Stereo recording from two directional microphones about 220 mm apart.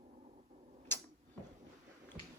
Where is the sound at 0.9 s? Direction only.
10° left (ahead or behind).